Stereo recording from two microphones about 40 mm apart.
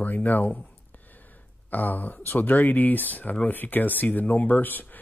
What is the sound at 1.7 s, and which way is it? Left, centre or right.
A man's voice, left.